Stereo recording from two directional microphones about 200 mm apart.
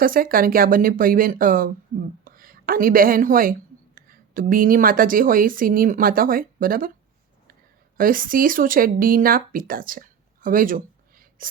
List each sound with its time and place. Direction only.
0.0 s a woman's voice: 45° right (ahead or behind)
7.9 s speech: 45° right (ahead or behind)